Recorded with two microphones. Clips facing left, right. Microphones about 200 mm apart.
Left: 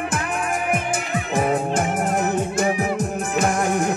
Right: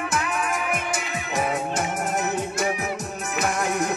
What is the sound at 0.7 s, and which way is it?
Music, 50° left (ahead or behind).